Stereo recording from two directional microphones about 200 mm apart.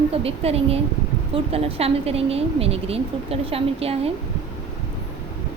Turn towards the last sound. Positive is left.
turn(degrees=-30)  # may be behind; listen again after turning